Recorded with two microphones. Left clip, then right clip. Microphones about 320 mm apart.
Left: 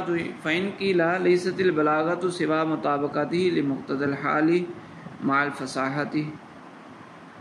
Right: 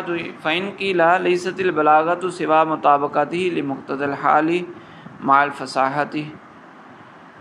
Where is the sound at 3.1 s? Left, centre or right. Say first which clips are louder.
Right 4 dB; right.